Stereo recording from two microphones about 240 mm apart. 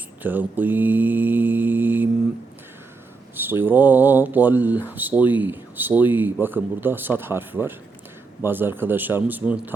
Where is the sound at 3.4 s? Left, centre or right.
Centre.